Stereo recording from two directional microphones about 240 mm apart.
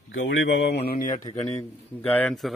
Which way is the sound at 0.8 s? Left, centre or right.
Left.